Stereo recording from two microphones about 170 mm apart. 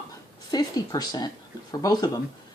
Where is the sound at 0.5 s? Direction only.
25° left (ahead or behind).